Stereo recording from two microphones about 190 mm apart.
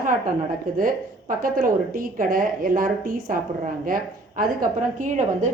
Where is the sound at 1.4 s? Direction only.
45° right (ahead or behind).